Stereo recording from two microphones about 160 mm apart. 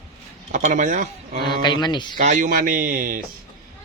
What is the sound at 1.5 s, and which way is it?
Speech, 30° left (ahead or behind).